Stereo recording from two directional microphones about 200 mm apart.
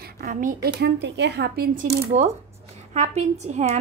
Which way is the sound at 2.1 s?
35° right (ahead or behind).